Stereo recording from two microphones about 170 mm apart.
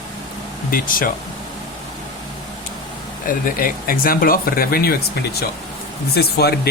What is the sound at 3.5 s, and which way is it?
Speech, 55° left (ahead or behind).